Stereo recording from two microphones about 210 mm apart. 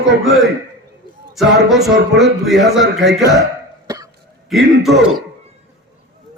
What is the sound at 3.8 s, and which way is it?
Cough, 15° right (ahead or behind).